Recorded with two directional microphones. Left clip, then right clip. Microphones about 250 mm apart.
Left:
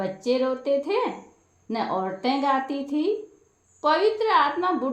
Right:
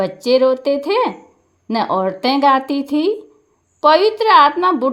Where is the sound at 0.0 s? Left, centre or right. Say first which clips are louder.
Right 11 dB; right.